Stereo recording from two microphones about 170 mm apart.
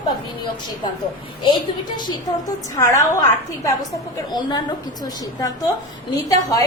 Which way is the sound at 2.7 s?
20° left (ahead or behind).